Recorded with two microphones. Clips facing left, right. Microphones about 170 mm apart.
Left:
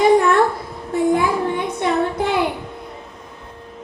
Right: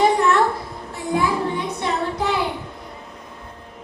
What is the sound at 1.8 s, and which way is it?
Music, 55° left (ahead or behind).